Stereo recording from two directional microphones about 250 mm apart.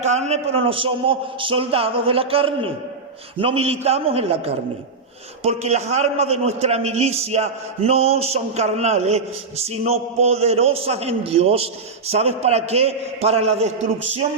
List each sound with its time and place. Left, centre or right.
0.0 s a man's voice: right